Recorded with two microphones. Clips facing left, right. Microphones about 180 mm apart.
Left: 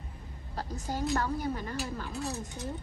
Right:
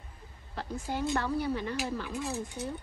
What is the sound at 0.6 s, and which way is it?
A woman's voice, 40° left (ahead or behind).